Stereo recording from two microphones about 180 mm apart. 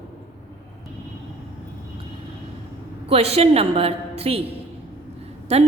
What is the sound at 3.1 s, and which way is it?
A woman's voice, 35° right (ahead or behind).